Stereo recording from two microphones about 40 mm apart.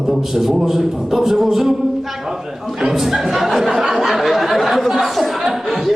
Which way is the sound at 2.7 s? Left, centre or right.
Centre.